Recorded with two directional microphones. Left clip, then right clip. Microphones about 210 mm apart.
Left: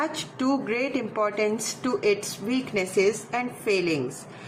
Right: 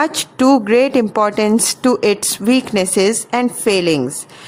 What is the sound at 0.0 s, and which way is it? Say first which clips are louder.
A woman's voice: right 13 dB; 60° right (ahead or behind).